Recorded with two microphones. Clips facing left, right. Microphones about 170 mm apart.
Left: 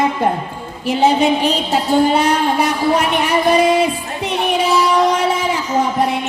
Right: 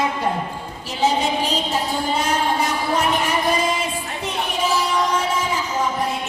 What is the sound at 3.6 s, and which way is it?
Music, 65° left (ahead or behind).